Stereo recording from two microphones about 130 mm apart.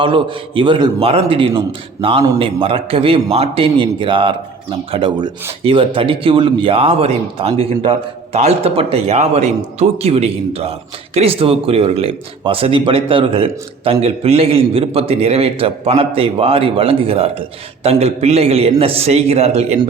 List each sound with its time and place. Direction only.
0.0 s speech: 40° right (ahead or behind)